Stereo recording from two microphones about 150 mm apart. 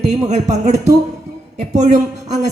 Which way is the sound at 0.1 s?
50° right (ahead or behind).